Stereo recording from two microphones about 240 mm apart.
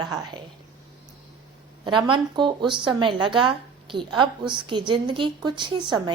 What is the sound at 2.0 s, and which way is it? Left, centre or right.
A woman's voice, centre.